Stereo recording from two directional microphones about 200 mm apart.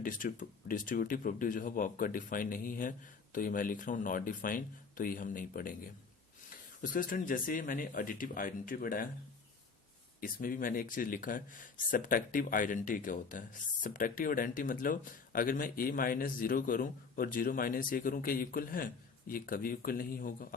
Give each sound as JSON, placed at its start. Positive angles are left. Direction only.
{"t": 0.0, "sound": "speech", "side_deg": 40}
{"t": 10.2, "sound": "speech", "side_deg": 45}